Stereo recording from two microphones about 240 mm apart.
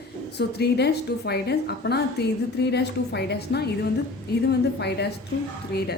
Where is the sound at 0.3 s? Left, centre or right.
Left.